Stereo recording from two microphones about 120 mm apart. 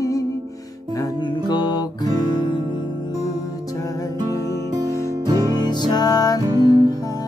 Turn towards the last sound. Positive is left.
turn(degrees=30)  # may be behind; listen again after turning